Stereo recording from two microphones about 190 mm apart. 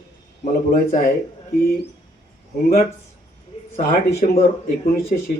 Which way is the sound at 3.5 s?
30° left (ahead or behind).